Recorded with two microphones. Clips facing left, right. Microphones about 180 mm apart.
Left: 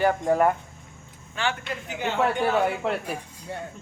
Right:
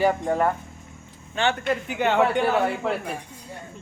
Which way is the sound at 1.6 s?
65° right (ahead or behind).